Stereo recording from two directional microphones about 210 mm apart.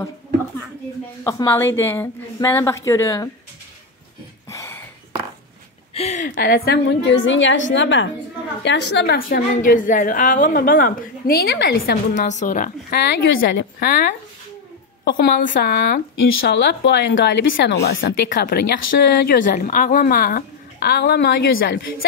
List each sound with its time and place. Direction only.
1.2 s a woman's voice: 15° left (ahead or behind)
4.5 s a sound: 15° left (ahead or behind)
5.9 s speech: 30° left (ahead or behind)
6.3 s a woman's voice: 45° left (ahead or behind)
16.3 s a woman's voice: 65° left (ahead or behind)